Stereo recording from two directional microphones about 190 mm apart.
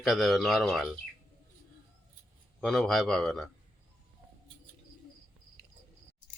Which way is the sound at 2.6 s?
Centre (ahead or behind).